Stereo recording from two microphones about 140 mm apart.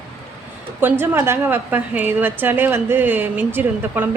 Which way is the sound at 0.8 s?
15° right (ahead or behind).